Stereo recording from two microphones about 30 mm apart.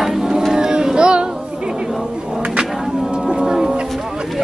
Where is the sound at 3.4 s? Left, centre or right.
Centre.